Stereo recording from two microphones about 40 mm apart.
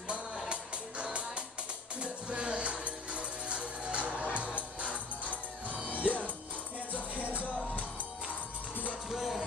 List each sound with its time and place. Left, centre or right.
0.5 s music: right
9.1 s music: centre